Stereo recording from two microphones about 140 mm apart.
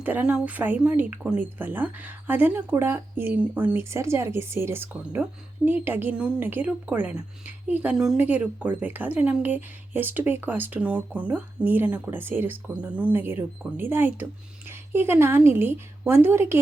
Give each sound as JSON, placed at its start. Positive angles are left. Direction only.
{"t": 0.0, "sound": "speech", "side_deg": -10}